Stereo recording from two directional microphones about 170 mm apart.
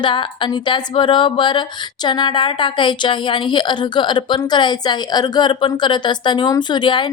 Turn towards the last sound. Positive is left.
turn(degrees=25)  # may be behind; listen again after turning